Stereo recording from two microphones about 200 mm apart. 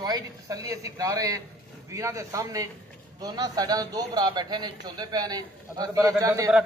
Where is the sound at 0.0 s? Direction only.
20° right (ahead or behind).